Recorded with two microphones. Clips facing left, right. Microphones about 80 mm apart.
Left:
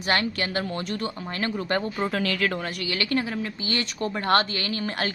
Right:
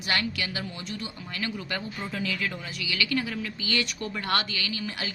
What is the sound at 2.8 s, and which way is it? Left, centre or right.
A woman's voice, left.